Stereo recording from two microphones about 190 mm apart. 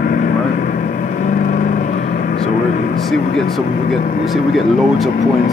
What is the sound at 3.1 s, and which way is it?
Speech, centre (ahead or behind).